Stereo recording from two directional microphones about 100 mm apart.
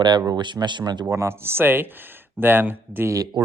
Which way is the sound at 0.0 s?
45° right (ahead or behind).